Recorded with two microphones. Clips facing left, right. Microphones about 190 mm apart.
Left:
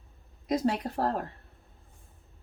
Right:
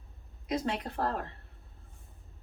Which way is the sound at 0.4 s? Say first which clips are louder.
Left 5 dB; 40° left (ahead or behind).